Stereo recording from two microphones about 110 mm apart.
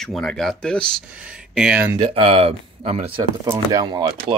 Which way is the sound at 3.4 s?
30° right (ahead or behind).